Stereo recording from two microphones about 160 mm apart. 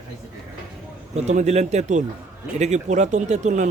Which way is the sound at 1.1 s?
45° right (ahead or behind).